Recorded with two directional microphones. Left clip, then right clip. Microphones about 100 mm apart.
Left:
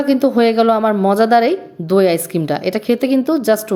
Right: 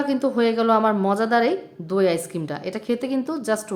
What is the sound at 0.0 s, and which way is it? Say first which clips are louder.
Speech: left 7 dB; 50° left (ahead or behind).